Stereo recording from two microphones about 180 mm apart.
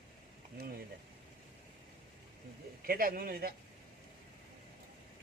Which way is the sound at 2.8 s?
55° right (ahead or behind).